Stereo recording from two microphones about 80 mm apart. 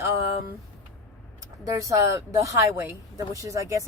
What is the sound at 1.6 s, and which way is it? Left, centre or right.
Speech, right.